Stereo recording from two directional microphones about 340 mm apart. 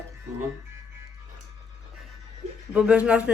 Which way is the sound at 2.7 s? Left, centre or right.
Centre.